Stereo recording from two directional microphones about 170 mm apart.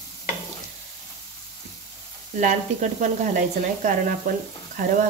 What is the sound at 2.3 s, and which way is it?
Speech, 45° right (ahead or behind).